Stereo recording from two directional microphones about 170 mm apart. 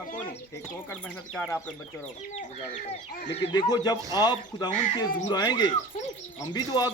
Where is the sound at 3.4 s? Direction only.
35° left (ahead or behind).